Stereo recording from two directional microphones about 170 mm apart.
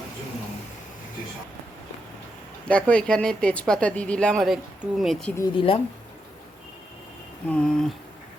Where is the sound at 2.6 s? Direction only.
5° left (ahead or behind).